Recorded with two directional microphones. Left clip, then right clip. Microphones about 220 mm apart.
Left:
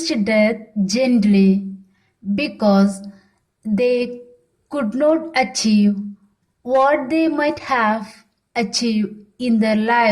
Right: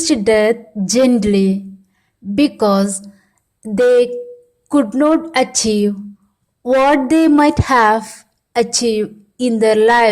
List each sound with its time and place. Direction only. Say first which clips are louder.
0.0 s a woman's voice: right 5 dB; 40° right (ahead or behind)